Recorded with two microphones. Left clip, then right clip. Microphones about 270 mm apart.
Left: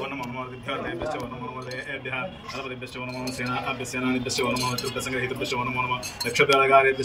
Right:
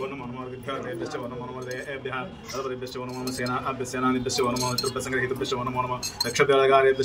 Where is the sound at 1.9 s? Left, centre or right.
Centre.